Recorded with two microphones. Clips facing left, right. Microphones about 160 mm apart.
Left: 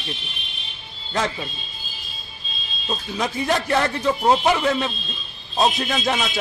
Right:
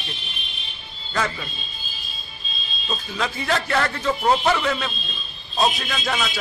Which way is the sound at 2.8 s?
20° left (ahead or behind).